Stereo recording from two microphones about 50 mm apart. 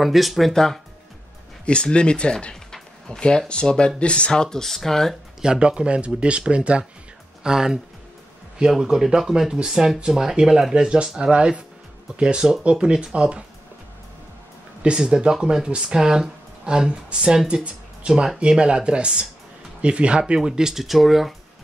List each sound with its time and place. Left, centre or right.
0.0 s speech: centre
0.5 s speech: centre
1.7 s speech: left
5.4 s speech: centre
14.8 s speech: centre